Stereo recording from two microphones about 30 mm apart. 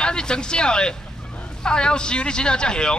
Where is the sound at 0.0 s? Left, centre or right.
Left.